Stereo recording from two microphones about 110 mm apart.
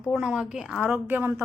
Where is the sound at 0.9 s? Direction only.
20° right (ahead or behind).